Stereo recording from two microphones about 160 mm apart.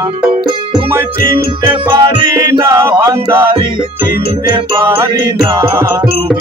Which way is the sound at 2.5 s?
15° right (ahead or behind).